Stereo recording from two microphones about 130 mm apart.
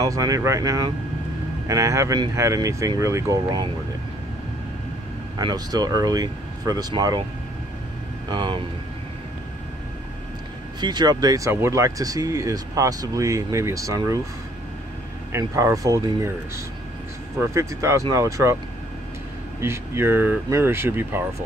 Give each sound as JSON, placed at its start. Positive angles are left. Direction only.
{"t": 0.0, "sound": "speech", "side_deg": -25}
{"t": 5.4, "sound": "speech", "side_deg": -30}
{"t": 8.3, "sound": "speech", "side_deg": -35}
{"t": 10.8, "sound": "speech", "side_deg": -35}
{"t": 15.3, "sound": "speech", "side_deg": -25}
{"t": 19.6, "sound": "speech", "side_deg": -20}